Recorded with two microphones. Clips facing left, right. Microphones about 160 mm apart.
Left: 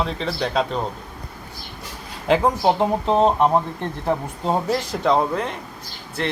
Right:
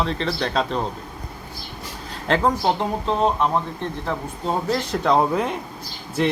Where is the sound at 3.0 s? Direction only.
45° left (ahead or behind).